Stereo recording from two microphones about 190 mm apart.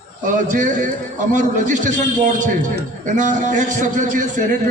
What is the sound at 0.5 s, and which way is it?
A man's voice, 40° right (ahead or behind).